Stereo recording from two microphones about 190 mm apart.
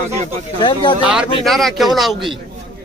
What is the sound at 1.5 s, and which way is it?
Speech, centre (ahead or behind).